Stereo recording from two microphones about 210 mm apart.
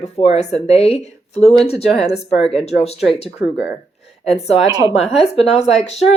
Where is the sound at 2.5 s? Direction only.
30° left (ahead or behind).